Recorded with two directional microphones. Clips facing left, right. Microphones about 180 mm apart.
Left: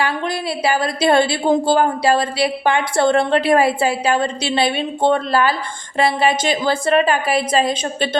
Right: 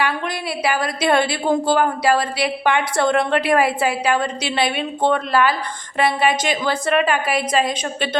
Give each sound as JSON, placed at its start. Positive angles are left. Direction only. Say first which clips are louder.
{"t": 0.6, "sound": "a woman's voice", "louder": "left 3 dB", "side_deg": 30}